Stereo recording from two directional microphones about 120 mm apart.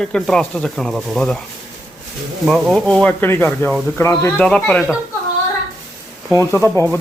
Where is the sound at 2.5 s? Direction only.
Centre (ahead or behind); by 4.3 s 25° left (ahead or behind).